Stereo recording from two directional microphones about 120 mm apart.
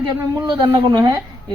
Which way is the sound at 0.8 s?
40° right (ahead or behind).